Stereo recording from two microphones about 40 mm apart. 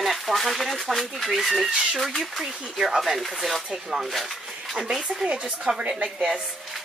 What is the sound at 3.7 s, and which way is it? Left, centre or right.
Speech, centre.